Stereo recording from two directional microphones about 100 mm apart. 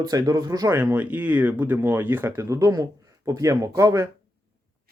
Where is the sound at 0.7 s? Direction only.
15° right (ahead or behind); by 4.1 s 35° right (ahead or behind).